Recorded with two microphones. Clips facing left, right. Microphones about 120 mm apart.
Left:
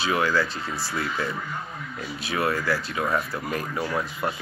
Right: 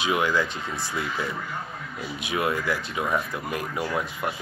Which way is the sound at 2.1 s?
15° right (ahead or behind).